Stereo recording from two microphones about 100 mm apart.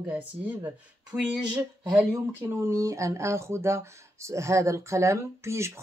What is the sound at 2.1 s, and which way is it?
Speech, 30° right (ahead or behind).